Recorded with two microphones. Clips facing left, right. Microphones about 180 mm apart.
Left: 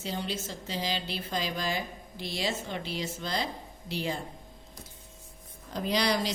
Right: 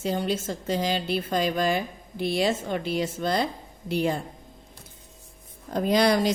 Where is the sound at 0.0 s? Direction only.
50° right (ahead or behind).